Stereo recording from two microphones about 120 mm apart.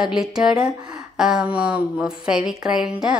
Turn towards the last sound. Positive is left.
turn(degrees=-5)  # may be behind; listen again after turning